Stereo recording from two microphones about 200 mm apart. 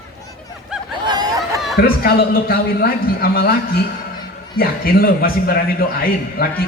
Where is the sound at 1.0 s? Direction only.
20° right (ahead or behind).